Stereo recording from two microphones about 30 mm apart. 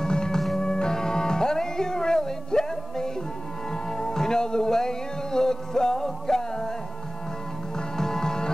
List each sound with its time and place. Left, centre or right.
0.0 s music: left
7.7 s music: centre